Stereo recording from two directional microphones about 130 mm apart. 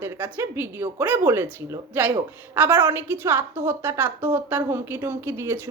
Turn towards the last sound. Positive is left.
turn(degrees=-20)  # may be behind; listen again after turning